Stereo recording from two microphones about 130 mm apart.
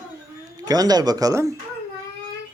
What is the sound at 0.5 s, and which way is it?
Speech, 30° right (ahead or behind).